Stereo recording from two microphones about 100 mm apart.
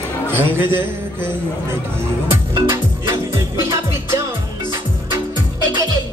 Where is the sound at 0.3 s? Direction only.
25° right (ahead or behind).